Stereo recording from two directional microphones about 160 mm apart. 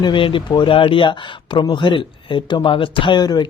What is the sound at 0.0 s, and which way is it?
Speech, 30° left (ahead or behind).